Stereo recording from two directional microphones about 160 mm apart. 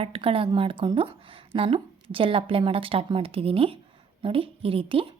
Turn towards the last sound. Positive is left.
turn(degrees=-35)  # may be behind; listen again after turning